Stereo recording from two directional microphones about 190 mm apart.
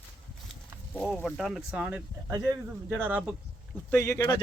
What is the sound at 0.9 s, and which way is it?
Speech, 5° left (ahead or behind).